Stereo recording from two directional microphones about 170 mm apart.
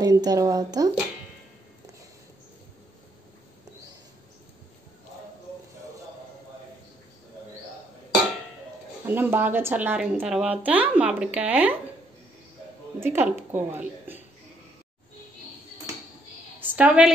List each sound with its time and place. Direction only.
0.0 s a woman's voice: 20° right (ahead or behind)
9.0 s speech: 10° right (ahead or behind)
13.0 s speech: 15° right (ahead or behind)
16.5 s a sound: 10° right (ahead or behind)